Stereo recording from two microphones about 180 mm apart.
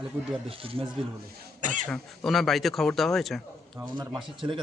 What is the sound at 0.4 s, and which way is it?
Speech, 30° right (ahead or behind).